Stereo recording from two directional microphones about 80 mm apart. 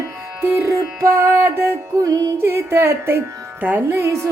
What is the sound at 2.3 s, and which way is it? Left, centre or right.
Music, right.